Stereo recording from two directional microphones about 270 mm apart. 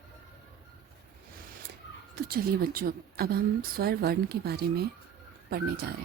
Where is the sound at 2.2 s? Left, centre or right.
Right.